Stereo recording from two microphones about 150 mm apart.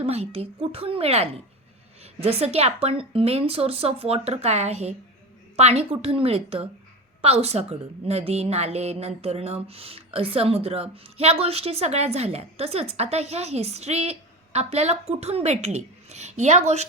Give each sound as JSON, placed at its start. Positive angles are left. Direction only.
{"t": 0.0, "sound": "a woman's voice", "side_deg": -40}